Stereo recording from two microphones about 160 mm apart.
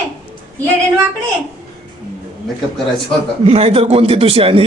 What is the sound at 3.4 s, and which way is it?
Speech, 40° right (ahead or behind).